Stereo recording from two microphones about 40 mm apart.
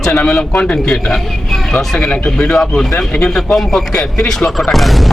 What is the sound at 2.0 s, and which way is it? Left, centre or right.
Speech, left.